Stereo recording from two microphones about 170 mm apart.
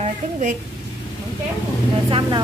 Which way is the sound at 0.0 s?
45° right (ahead or behind).